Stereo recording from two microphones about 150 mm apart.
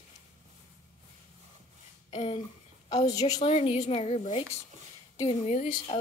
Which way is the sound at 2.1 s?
50° left (ahead or behind).